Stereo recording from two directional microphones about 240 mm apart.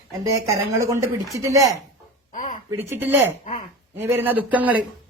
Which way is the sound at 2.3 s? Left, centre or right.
Left.